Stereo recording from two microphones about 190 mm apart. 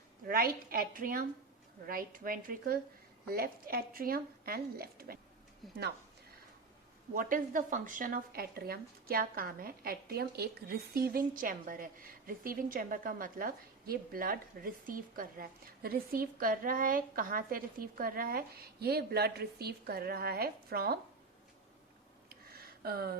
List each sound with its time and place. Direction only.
0.3 s speech: 50° right (ahead or behind)
5.6 s a woman's voice: centre (ahead or behind)
7.1 s speech: 45° right (ahead or behind)
22.3 s a sound: 55° right (ahead or behind)